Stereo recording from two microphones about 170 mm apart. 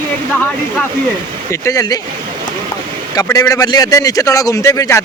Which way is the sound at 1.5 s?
20° left (ahead or behind).